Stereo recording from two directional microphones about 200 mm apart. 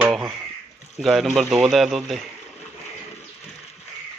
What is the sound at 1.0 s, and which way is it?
Speech, centre (ahead or behind).